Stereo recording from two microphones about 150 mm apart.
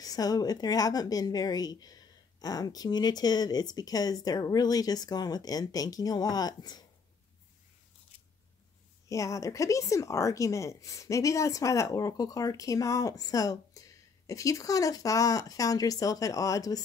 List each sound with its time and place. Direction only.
0.0 s a woman's voice: 25° left (ahead or behind)
9.1 s a woman's voice: 20° left (ahead or behind)